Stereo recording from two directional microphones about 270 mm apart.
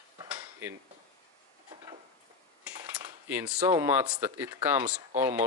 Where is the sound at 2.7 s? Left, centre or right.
Centre.